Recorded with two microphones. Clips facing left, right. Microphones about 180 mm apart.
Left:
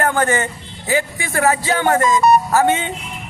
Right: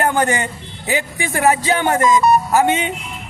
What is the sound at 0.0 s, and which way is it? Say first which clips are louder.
A man's voice: even; 15° right (ahead or behind).